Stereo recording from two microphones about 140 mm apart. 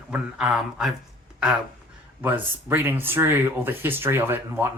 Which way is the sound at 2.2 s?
15° right (ahead or behind).